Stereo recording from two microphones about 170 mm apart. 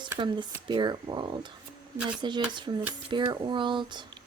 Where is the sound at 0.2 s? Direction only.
25° right (ahead or behind).